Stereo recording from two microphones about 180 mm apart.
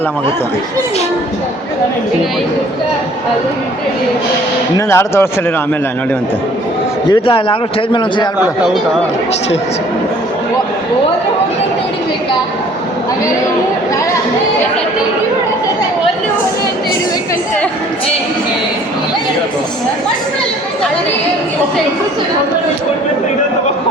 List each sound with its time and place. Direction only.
4.9 s speech: 15° left (ahead or behind)
7.1 s a man's voice: 30° left (ahead or behind)
8.4 s speech: 5° right (ahead or behind)